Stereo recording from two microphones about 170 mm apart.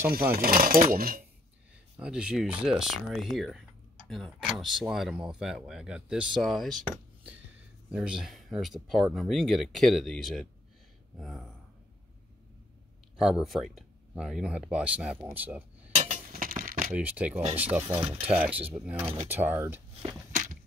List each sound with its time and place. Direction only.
0.3 s speech: 60° right (ahead or behind)
2.0 s speech: 5° right (ahead or behind)
7.9 s speech: 5° right (ahead or behind)
13.2 s speech: centre (ahead or behind)
15.9 s chink: 45° right (ahead or behind)
16.9 s speech: 10° right (ahead or behind)